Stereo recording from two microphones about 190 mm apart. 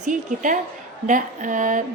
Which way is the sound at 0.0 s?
40° right (ahead or behind).